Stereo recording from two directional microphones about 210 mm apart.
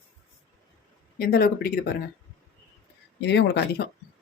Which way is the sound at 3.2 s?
55° left (ahead or behind).